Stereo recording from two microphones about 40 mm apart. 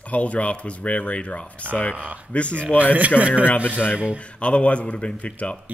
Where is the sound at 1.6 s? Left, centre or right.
Right.